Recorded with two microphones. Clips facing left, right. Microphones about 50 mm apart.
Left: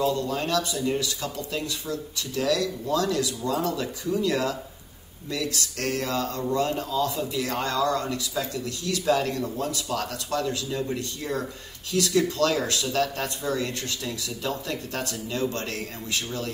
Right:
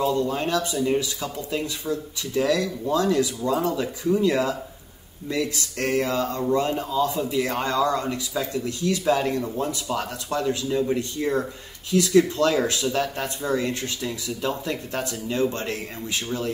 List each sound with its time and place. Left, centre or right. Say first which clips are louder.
0.0 s speech: right 2 dB; right